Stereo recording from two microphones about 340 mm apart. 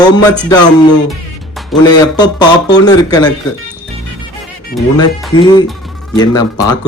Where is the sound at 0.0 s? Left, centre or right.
Centre.